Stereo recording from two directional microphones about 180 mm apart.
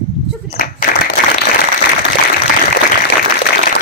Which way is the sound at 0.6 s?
45° left (ahead or behind).